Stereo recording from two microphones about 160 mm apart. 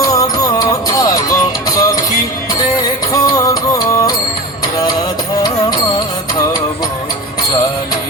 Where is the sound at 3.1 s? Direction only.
20° left (ahead or behind).